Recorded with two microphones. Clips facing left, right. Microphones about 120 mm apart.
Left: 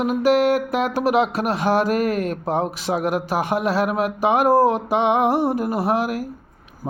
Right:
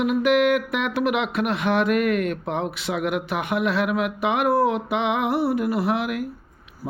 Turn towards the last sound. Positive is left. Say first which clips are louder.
# left 2 dB
turn(degrees=40)  # may be behind; listen again after turning